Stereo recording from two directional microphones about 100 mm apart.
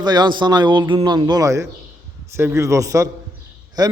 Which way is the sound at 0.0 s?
45° right (ahead or behind).